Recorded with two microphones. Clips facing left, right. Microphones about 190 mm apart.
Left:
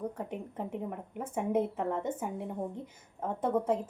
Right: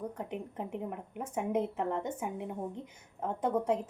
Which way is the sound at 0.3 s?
Centre (ahead or behind).